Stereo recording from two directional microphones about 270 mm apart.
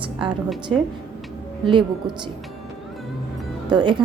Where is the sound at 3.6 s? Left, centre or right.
Centre.